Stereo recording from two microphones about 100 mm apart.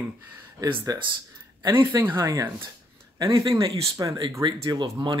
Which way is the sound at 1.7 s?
25° right (ahead or behind).